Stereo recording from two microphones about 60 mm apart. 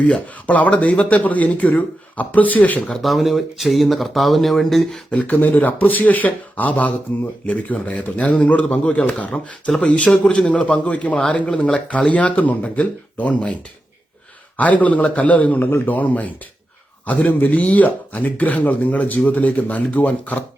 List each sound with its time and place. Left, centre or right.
0.0 s a man's voice: left
2.9 s speech: centre
5.1 s a man's voice: left